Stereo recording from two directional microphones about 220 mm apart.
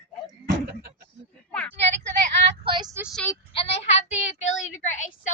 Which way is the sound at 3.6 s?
30° left (ahead or behind).